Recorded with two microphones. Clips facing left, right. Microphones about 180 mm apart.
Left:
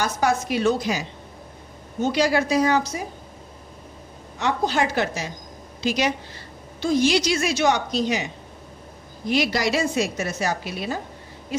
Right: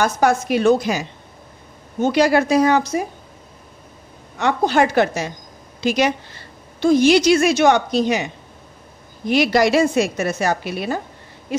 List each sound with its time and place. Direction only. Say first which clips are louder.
0.0 s a woman's voice: right 5 dB; 55° right (ahead or behind)
4.4 s a woman's voice: right 5 dB; 60° right (ahead or behind)
9.3 s a woman's voice: right 6 dB; 60° right (ahead or behind)